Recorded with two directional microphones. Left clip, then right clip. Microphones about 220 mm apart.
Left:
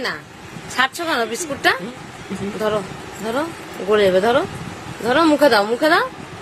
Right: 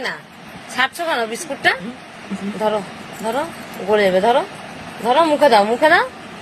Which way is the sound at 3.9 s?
15° left (ahead or behind).